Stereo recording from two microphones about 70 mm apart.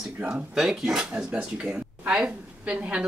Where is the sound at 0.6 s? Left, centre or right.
Centre.